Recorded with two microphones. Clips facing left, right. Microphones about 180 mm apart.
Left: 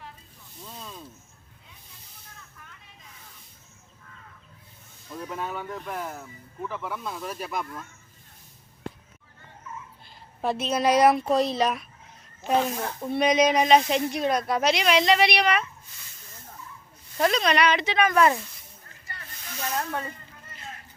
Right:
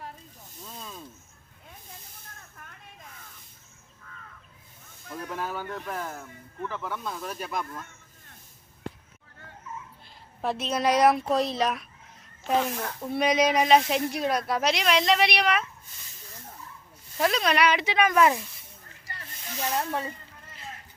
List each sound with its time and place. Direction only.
0.6 s snake: 5° right (ahead or behind)
2.6 s vehicle: 50° right (ahead or behind)
5.1 s speech: centre (ahead or behind)
10.4 s speech: centre (ahead or behind)
13.0 s speech: 5° right (ahead or behind)
17.2 s speech: centre (ahead or behind)
19.5 s speech: 25° right (ahead or behind)